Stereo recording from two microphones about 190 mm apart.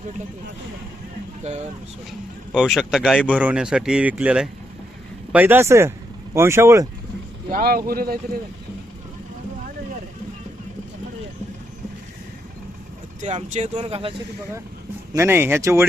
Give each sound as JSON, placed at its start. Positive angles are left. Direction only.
{"t": 2.5, "sound": "speech", "side_deg": -5}
{"t": 7.5, "sound": "speech", "side_deg": -50}
{"t": 13.2, "sound": "speech", "side_deg": -35}
{"t": 15.1, "sound": "speech", "side_deg": -15}